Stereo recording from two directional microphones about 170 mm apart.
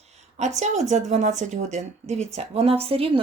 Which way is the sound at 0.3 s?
45° right (ahead or behind).